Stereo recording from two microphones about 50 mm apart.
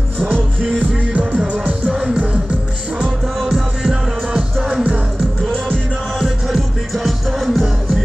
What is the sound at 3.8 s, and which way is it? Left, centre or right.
Music, centre.